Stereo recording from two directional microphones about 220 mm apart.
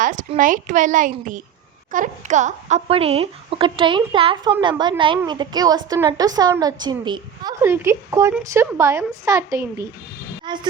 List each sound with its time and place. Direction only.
0.0 s a woman's voice: 35° right (ahead or behind); by 10.7 s 20° right (ahead or behind)